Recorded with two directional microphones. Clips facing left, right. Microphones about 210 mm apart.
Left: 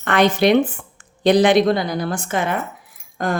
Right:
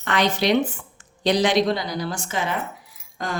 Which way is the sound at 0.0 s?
55° left (ahead or behind).